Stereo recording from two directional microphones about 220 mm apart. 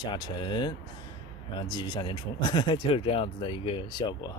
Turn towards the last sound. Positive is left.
turn(degrees=20)  # may be behind; listen again after turning